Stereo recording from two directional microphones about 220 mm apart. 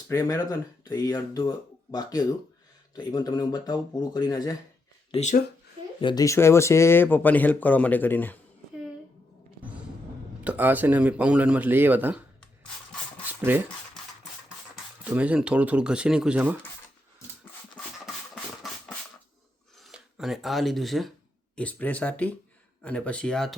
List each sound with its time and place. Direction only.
0.1 s speech: 15° left (ahead or behind)
5.1 s speech: 30° left (ahead or behind)
6.0 s speech: 20° left (ahead or behind)
10.4 s speech: 5° right (ahead or behind)
15.0 s speech: 5° right (ahead or behind)
19.8 s a sound: centre (ahead or behind)
21.5 s speech: 5° left (ahead or behind)